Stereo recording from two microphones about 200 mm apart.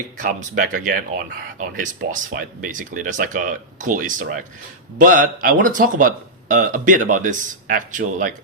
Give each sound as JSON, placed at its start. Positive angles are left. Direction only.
{"t": 0.2, "sound": "speech", "side_deg": -40}